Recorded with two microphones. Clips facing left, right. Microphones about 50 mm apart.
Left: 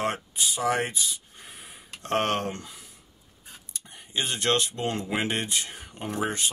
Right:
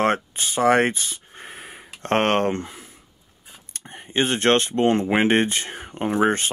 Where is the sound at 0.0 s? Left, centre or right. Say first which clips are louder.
Right 7 dB; right.